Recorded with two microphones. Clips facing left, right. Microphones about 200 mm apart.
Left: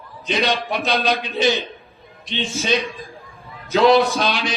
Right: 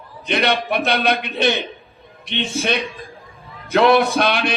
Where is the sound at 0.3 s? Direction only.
60° right (ahead or behind).